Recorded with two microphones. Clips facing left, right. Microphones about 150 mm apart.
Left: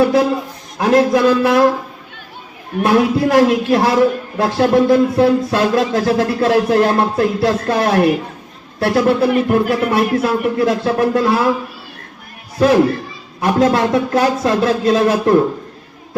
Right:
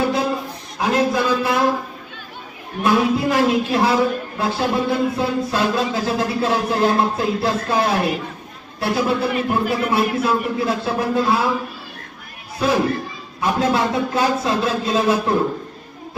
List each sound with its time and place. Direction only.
0.8 s speech: 75° left (ahead or behind)
2.8 s speech: 75° left (ahead or behind)
12.5 s speech: 70° left (ahead or behind)